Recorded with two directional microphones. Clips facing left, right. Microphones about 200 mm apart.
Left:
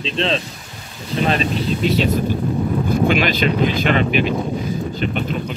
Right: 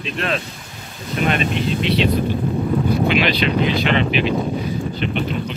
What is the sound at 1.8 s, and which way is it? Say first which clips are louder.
Speech: left 1 dB; 45° left (ahead or behind).